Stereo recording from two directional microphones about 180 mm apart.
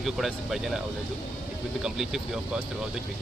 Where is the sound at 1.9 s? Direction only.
5° right (ahead or behind).